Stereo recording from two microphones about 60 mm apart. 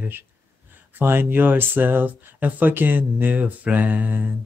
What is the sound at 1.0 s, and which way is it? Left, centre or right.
Mantra, right.